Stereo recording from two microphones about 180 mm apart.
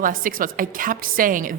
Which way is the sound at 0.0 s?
50° right (ahead or behind).